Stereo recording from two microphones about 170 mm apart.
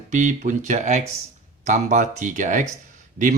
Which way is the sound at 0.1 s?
45° right (ahead or behind).